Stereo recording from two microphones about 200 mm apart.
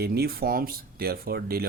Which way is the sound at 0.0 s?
50° right (ahead or behind).